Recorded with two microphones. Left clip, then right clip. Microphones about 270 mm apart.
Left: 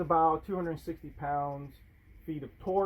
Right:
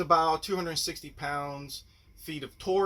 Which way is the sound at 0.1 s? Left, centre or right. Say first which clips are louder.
Right 2 dB; right.